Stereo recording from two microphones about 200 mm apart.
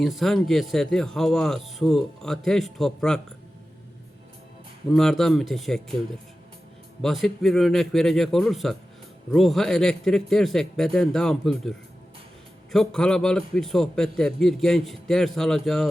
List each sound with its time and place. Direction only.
0.0 s a man's voice: centre (ahead or behind)
4.9 s a man's voice: centre (ahead or behind)
7.0 s a man's voice: centre (ahead or behind)